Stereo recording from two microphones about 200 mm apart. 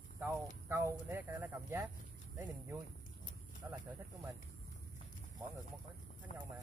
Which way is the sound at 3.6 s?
15° right (ahead or behind).